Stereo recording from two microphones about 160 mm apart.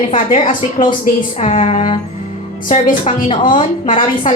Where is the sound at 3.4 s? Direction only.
55° left (ahead or behind).